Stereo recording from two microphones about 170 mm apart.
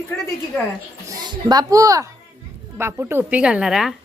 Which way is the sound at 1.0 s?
25° right (ahead or behind).